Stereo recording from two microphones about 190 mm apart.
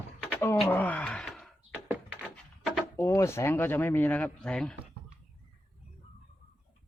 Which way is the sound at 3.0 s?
15° left (ahead or behind).